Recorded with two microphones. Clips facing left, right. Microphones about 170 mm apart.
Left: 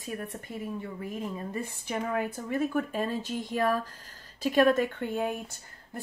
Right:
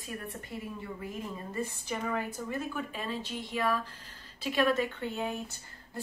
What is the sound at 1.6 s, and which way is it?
Speech, 55° left (ahead or behind).